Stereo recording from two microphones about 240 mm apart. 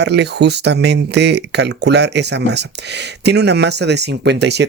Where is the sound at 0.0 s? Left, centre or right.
Right.